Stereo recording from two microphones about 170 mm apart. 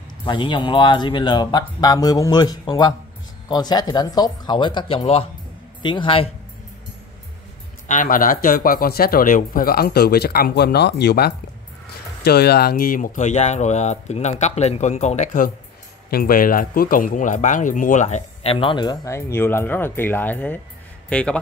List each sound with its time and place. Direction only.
0.2 s speech: 25° left (ahead or behind)
7.9 s speech: 50° left (ahead or behind)
16.1 s a man's voice: 60° left (ahead or behind); by 21.4 s 5° left (ahead or behind)